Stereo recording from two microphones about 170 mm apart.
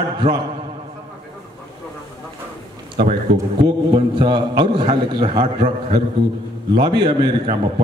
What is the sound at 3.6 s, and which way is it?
A man's voice, 30° right (ahead or behind).